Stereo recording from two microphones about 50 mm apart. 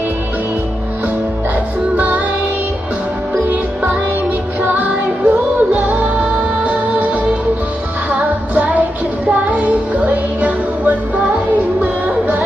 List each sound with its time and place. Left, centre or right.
2.0 s music: right
4.6 s music: right